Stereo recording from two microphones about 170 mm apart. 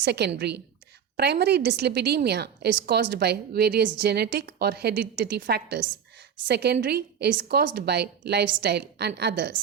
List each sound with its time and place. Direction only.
0.0 s a woman's voice: 80° right